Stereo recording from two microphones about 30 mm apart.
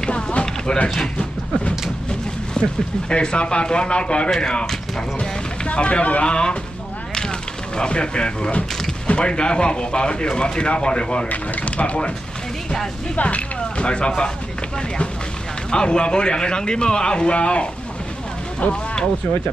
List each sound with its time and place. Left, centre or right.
0.1 s a sound: left
2.5 s speech: left
5.7 s speech: left
6.2 s speech: left
7.7 s speech: left
11.6 s speech: left
13.1 s speech: left
15.7 s speech: left